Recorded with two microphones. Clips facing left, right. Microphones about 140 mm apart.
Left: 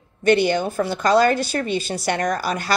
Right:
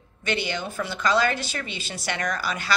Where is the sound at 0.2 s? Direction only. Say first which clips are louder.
Left 11 dB; 50° left (ahead or behind).